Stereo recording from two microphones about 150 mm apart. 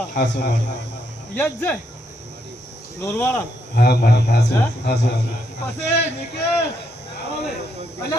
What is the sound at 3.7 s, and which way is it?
Speech, 90° left.